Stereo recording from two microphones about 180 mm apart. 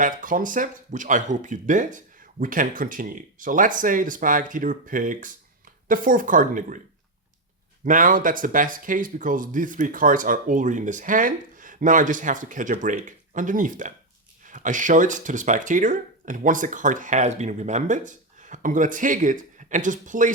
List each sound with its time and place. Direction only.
0.0 s speech: 50° right (ahead or behind)
7.9 s speech: 50° right (ahead or behind)